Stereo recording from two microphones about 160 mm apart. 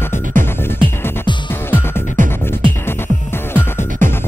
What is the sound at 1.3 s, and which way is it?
Music, 30° left (ahead or behind).